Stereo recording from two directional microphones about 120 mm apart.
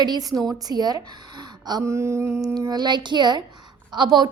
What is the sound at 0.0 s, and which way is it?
Speech, 35° right (ahead or behind).